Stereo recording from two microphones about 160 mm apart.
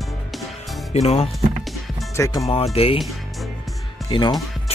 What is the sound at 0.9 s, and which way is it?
Music, 40° left (ahead or behind).